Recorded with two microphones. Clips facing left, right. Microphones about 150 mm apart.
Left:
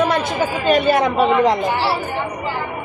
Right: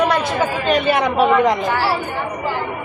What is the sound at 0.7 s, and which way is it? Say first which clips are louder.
Speech: left 3 dB; 40° left (ahead or behind).